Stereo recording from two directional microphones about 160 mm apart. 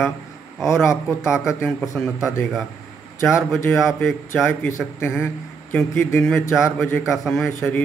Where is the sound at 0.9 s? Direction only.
20° left (ahead or behind).